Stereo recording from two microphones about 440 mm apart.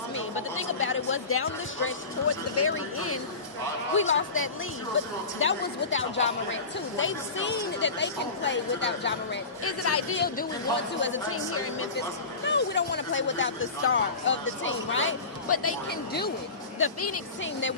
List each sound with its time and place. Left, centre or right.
0.1 s a woman's voice: left
2.6 s speech: left